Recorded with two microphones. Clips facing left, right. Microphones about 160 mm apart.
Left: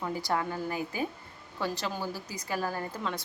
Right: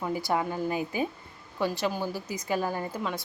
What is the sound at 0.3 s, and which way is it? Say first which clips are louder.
Speech: right 3 dB; 15° right (ahead or behind).